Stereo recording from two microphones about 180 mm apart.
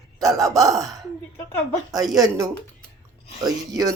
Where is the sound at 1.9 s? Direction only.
20° right (ahead or behind).